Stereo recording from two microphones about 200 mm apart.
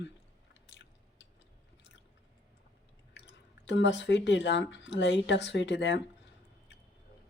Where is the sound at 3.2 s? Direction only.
60° left (ahead or behind).